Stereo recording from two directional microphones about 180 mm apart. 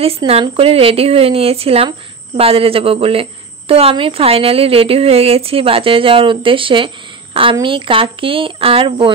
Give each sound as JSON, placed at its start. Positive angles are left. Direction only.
{"t": 0.0, "sound": "a woman's voice", "side_deg": -35}